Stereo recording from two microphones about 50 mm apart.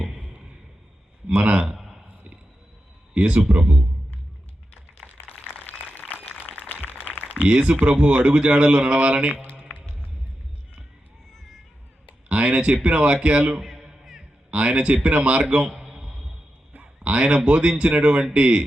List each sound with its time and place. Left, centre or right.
1.4 s a man's voice: right
1.6 s a sound: centre
3.2 s a man's voice: right
6.2 s a sound: left
7.3 s a man's voice: right
9.3 s a man's voice: left
9.6 s music: left
12.3 s a man's voice: right
13.7 s music: centre
14.5 s a man's voice: right
15.9 s a sound: centre
16.8 s a man's voice: right